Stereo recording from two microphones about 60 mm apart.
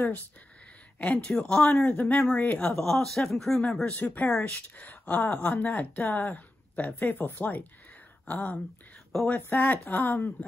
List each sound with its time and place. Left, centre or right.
1.1 s speech: centre
2.7 s speech: centre
3.9 s speech: left
4.3 s speech: centre
4.7 s speech: left
9.1 s speech: centre
9.5 s speech: left